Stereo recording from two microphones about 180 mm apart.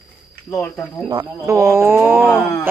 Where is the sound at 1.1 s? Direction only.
20° right (ahead or behind).